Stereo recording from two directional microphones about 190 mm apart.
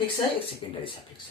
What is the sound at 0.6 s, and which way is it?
Speech, 25° left (ahead or behind).